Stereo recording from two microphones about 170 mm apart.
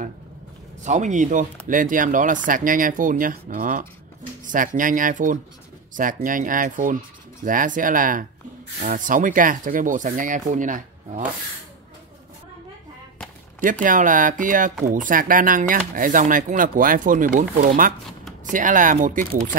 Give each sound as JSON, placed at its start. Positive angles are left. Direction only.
{"t": 0.8, "sound": "speech", "side_deg": -45}
{"t": 13.8, "sound": "speech", "side_deg": -50}